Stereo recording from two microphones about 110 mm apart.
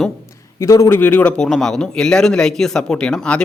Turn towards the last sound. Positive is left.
turn(degrees=10)  # may be behind; listen again after turning